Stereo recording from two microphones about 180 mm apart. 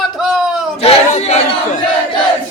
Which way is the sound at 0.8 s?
35° left (ahead or behind).